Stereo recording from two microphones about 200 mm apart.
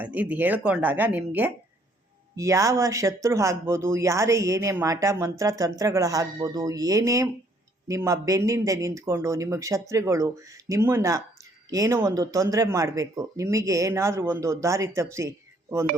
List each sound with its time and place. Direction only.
0.0 s speech: 10° right (ahead or behind)